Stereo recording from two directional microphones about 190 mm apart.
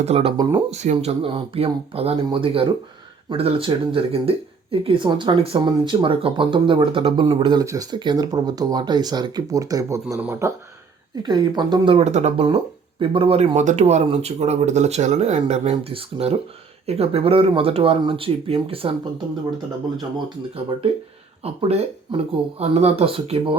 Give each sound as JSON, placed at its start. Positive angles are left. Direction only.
{"t": 0.0, "sound": "speech", "side_deg": -30}
{"t": 21.4, "sound": "speech", "side_deg": -30}